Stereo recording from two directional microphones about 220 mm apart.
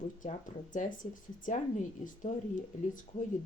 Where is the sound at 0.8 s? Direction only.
35° left (ahead or behind).